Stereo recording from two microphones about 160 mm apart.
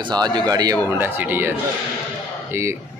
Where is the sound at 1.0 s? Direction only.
10° right (ahead or behind).